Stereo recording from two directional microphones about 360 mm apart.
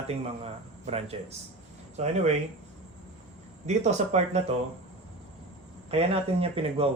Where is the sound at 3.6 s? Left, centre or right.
Centre.